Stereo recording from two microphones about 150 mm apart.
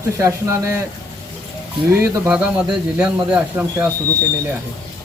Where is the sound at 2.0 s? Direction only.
15° right (ahead or behind).